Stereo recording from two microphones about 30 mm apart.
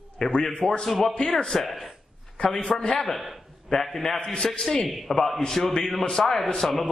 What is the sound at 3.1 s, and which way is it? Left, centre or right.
Speech, centre.